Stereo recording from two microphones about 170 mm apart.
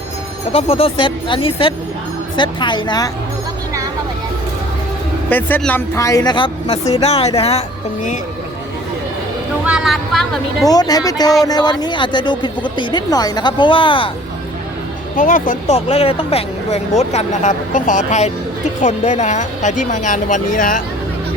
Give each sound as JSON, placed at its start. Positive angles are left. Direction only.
{"t": 0.5, "sound": "a woman's voice", "side_deg": 35}
{"t": 5.3, "sound": "a woman's voice", "side_deg": 10}
{"t": 9.6, "sound": "a woman's voice", "side_deg": -5}
{"t": 10.7, "sound": "a woman's voice", "side_deg": 20}
{"t": 15.1, "sound": "speech", "side_deg": 55}
{"t": 15.7, "sound": "speech", "side_deg": 35}